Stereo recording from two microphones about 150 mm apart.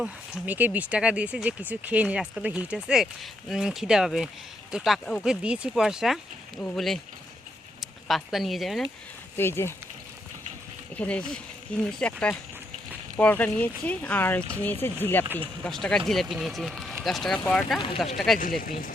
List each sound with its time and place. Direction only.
0.0 s speech: 10° right (ahead or behind)
9.4 s speech: 15° left (ahead or behind)
10.9 s speech: 10° left (ahead or behind)
13.1 s speech: 10° left (ahead or behind)
18.3 s speech: 65° left (ahead or behind)